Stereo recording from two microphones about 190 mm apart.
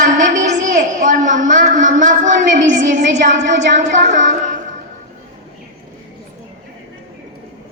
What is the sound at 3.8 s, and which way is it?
Speech, 40° right (ahead or behind).